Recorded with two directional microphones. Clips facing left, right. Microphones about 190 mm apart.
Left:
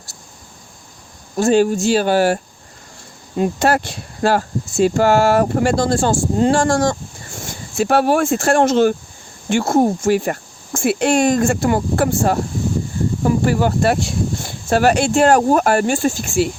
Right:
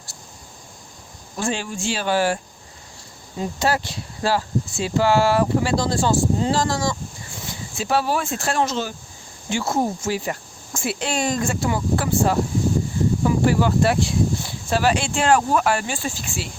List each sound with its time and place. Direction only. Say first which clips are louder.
1.4 s speech: left 12 dB; 40° left (ahead or behind)
3.3 s speech: left 6 dB; 60° left (ahead or behind)